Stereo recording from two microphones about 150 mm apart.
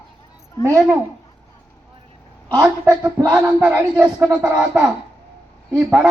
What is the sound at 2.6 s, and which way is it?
Speech, 10° right (ahead or behind).